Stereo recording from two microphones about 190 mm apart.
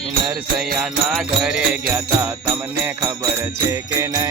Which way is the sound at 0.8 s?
Centre (ahead or behind).